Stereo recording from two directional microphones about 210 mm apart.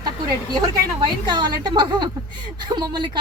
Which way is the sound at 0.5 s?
20° right (ahead or behind).